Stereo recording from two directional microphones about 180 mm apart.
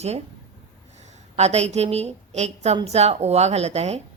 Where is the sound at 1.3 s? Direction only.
35° right (ahead or behind).